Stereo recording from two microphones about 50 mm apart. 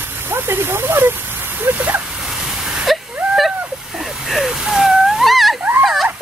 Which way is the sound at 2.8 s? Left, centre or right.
Centre.